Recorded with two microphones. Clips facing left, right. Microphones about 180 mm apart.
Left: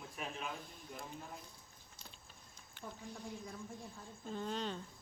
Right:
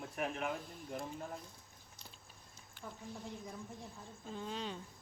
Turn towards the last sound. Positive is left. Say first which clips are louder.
# left 2 dB
turn(degrees=-5)  # may be behind; listen again after turning